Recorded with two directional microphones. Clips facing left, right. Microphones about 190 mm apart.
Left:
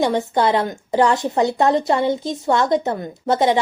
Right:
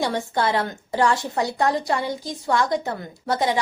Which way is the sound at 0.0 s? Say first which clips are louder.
Left 5 dB; 20° left (ahead or behind).